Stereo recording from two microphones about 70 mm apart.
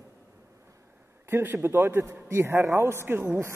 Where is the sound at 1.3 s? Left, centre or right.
Right.